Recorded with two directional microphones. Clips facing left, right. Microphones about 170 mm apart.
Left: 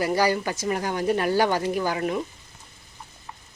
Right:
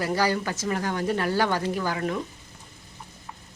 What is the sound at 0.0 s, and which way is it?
Speech, 15° left (ahead or behind).